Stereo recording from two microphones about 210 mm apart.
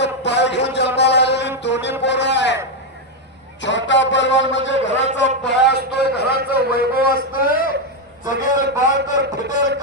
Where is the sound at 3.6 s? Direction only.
60° left (ahead or behind).